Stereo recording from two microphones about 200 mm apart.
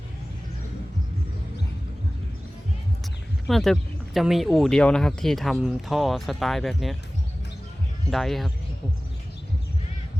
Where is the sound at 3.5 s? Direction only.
Centre (ahead or behind).